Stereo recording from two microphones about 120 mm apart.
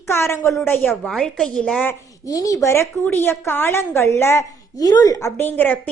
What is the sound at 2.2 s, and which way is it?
A woman's voice, 30° left (ahead or behind).